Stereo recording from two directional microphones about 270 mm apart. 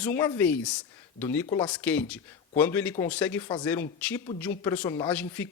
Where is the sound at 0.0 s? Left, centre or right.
Centre.